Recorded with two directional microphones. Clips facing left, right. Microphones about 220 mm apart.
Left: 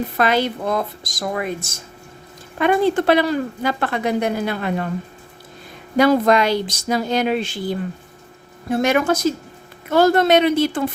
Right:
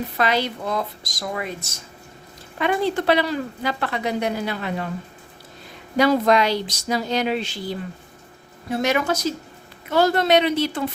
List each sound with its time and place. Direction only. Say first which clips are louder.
0.2 s a woman's voice: left 3 dB; 50° left (ahead or behind)
6.0 s a woman's voice: left 3 dB; 50° left (ahead or behind)